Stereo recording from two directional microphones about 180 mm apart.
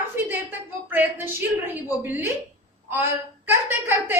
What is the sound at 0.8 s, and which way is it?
A woman's voice, 10° right (ahead or behind).